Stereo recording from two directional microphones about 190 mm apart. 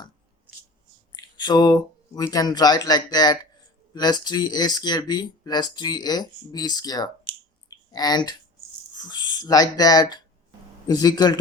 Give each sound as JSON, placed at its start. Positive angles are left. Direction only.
{"t": 1.1, "sound": "speech", "side_deg": 20}